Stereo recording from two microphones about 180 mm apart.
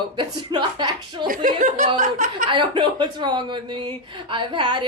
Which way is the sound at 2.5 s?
25° right (ahead or behind).